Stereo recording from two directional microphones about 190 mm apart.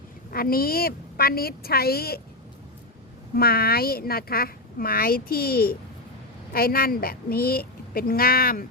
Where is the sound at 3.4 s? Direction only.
55° left (ahead or behind).